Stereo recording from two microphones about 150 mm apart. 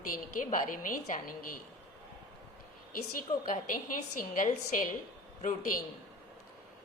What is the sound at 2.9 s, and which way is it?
A woman's voice, 65° left (ahead or behind).